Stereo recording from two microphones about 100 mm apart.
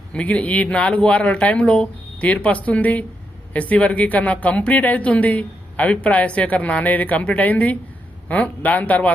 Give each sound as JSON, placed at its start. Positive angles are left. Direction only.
{"t": 0.1, "sound": "a woman's voice", "side_deg": 10}